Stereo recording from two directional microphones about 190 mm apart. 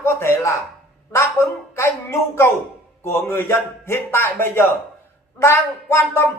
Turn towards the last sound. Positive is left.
turn(degrees=10)  # may be behind; listen again after turning